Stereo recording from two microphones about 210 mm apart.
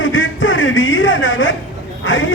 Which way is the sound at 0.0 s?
65° left (ahead or behind).